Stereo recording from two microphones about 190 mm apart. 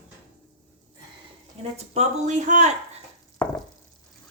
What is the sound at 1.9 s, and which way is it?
Speech, 35° right (ahead or behind).